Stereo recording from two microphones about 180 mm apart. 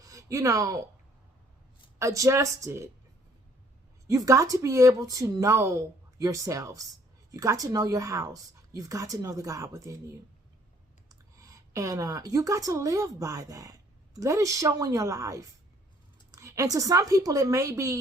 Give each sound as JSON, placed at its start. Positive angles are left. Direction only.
{"t": 0.0, "sound": "speech", "side_deg": -20}
{"t": 2.0, "sound": "speech", "side_deg": -15}
{"t": 4.0, "sound": "speech", "side_deg": -20}